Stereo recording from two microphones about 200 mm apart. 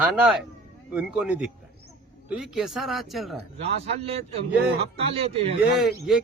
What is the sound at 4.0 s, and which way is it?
Speech, 30° right (ahead or behind).